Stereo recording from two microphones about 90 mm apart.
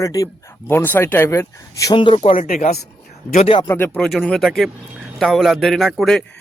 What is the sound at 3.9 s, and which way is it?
A man's voice, centre (ahead or behind).